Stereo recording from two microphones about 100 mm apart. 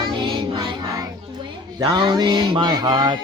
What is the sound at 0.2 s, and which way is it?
Music, 55° right (ahead or behind).